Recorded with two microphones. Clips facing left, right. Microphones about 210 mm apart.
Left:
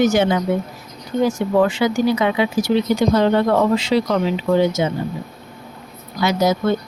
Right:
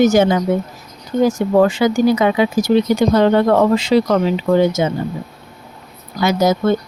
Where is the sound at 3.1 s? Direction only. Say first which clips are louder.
Right 4 dB; 55° right (ahead or behind).